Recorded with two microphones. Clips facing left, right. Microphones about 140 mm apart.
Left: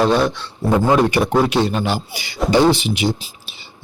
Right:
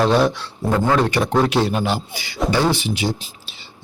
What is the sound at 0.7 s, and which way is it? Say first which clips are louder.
Speech: left 3 dB; 15° left (ahead or behind).